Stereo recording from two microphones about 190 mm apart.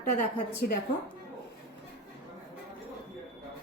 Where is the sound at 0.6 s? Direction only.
50° left (ahead or behind).